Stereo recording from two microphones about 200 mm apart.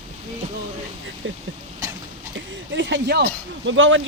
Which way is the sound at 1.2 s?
70° right (ahead or behind).